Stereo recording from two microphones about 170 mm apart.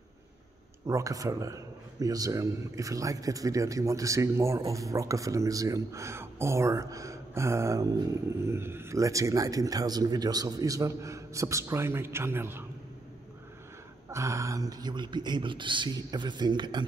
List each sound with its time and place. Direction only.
0.8 s a man's voice: 20° right (ahead or behind)
14.0 s a man's voice: 15° right (ahead or behind)